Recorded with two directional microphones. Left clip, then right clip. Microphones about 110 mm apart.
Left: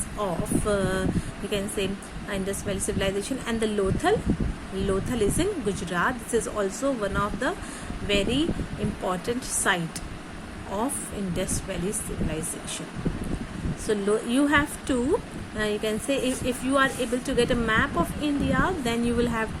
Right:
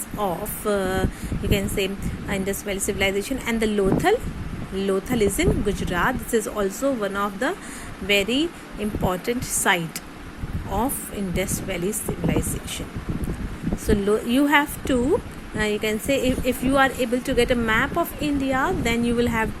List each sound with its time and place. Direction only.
0.2 s a woman's voice: 30° right (ahead or behind)
11.3 s a woman's voice: 30° right (ahead or behind)
13.8 s a woman's voice: 30° right (ahead or behind)